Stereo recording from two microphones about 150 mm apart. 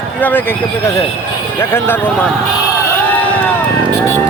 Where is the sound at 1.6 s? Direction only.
15° left (ahead or behind).